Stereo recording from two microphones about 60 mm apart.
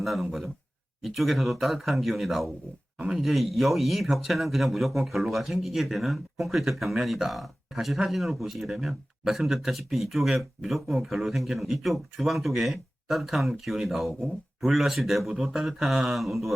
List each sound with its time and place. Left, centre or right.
0.0 s speech: centre